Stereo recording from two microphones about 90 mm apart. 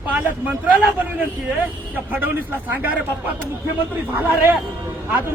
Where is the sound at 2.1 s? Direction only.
20° right (ahead or behind).